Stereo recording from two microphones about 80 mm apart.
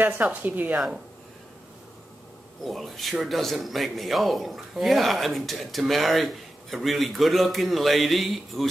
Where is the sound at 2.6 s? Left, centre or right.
Centre.